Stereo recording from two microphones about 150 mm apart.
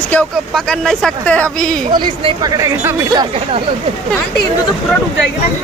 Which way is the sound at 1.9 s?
30° right (ahead or behind).